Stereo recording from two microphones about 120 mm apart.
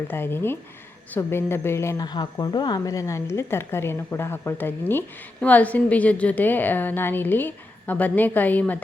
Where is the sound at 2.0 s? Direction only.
35° left (ahead or behind).